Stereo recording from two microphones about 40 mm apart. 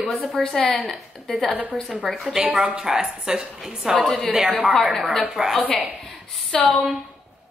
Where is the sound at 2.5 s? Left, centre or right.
Right.